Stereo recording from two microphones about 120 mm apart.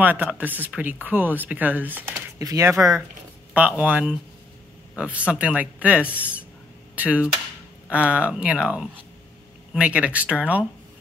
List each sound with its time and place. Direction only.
0.0 s speech: 15° right (ahead or behind)
2.3 s speech: 30° right (ahead or behind)
3.5 s speech: 10° right (ahead or behind)